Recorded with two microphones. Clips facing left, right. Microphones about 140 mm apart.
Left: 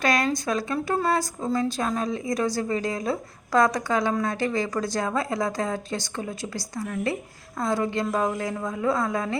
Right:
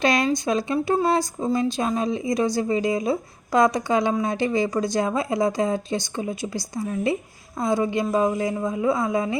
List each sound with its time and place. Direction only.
0.0 s a woman's voice: 20° right (ahead or behind)